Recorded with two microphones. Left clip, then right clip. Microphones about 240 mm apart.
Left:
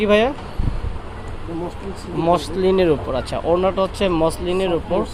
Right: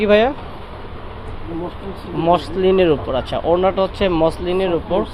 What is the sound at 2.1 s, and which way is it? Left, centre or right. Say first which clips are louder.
Speech: right 2 dB; centre.